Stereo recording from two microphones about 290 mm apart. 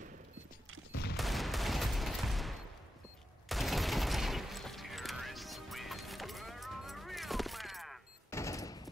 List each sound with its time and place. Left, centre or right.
1.1 s fusillade: centre